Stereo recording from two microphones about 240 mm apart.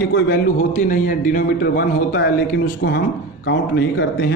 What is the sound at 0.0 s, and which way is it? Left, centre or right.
A man's voice, left.